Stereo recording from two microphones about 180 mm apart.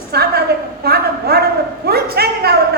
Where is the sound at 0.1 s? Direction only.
60° right (ahead or behind).